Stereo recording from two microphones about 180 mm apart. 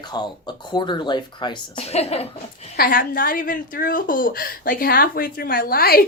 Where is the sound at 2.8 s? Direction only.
50° left (ahead or behind).